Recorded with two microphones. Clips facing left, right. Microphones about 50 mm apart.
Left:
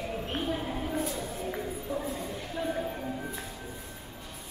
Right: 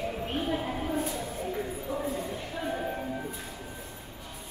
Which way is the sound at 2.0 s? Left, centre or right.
Centre.